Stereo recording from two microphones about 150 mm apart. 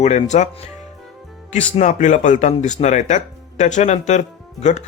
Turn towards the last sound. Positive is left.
turn(degrees=50)  # may be behind; listen again after turning